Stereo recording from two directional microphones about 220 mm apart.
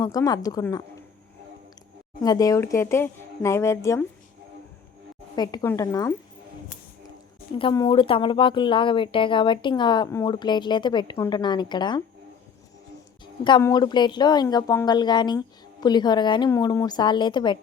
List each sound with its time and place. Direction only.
0.0 s speech: 15° left (ahead or behind)
2.2 s speech: 15° left (ahead or behind)
5.4 s speech: 15° left (ahead or behind)
7.6 s a woman's voice: 20° left (ahead or behind)
13.4 s a woman's voice: 15° left (ahead or behind)